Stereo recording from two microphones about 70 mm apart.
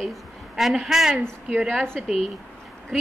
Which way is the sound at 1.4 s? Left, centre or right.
Centre.